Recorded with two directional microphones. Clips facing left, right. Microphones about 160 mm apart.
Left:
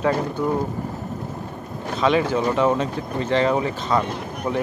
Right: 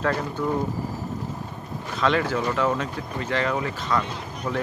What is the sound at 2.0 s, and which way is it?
Speech, 20° left (ahead or behind).